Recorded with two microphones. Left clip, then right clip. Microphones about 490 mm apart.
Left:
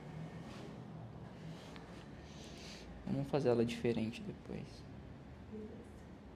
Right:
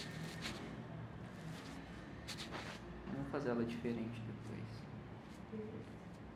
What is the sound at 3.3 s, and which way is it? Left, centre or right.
Speech, left.